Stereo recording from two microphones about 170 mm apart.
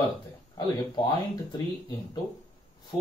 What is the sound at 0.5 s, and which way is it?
Speech, 25° left (ahead or behind).